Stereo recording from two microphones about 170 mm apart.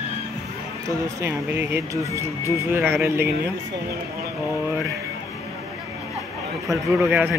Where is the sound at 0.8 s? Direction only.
15° right (ahead or behind).